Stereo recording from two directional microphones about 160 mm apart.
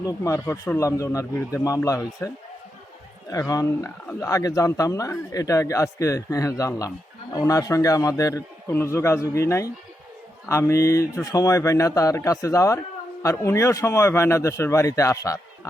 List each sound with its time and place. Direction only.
0.0 s speech: 20° left (ahead or behind)
3.3 s a man's voice: 20° left (ahead or behind)